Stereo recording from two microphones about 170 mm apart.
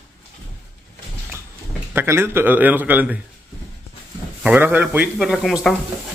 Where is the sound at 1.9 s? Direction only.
15° right (ahead or behind).